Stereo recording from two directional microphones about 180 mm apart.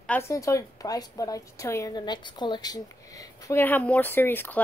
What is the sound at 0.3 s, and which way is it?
A woman's voice, 15° left (ahead or behind).